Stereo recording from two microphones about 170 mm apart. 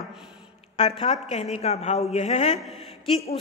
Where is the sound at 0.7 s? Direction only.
35° left (ahead or behind).